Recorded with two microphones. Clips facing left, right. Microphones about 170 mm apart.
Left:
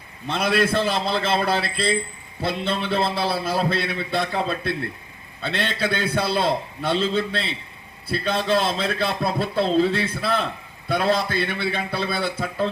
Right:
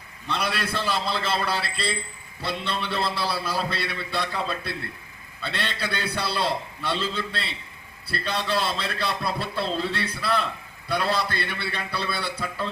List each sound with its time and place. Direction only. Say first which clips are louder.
0.3 s a man's voice: left 7 dB; 45° left (ahead or behind)